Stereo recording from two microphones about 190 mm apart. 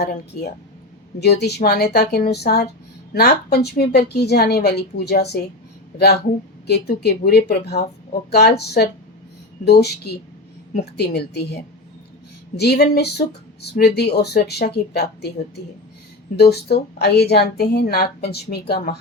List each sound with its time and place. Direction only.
1.2 s speech: 60° left (ahead or behind)
6.7 s speech: 60° left (ahead or behind)